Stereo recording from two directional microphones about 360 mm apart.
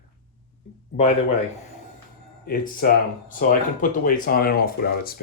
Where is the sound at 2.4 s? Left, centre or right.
Left.